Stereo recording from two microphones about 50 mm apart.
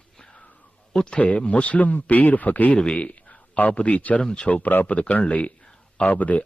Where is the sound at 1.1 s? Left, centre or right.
Left.